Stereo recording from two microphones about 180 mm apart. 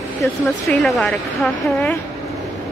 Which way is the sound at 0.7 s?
Centre (ahead or behind).